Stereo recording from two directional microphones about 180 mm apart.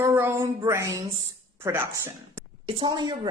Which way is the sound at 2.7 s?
25° right (ahead or behind).